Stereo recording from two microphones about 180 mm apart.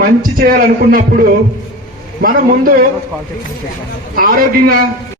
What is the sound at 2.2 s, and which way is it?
Speech, 50° right (ahead or behind).